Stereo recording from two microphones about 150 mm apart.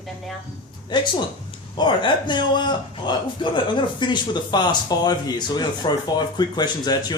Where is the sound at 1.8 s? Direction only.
30° left (ahead or behind).